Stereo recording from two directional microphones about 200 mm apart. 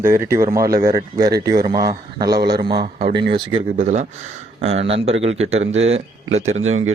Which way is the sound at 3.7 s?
35° right (ahead or behind).